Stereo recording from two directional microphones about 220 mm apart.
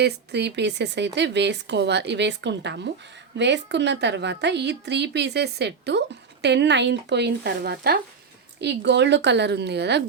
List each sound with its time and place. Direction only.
0.0 s speech: 50° right (ahead or behind)